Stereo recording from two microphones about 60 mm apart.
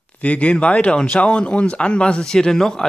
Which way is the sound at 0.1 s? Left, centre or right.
Left.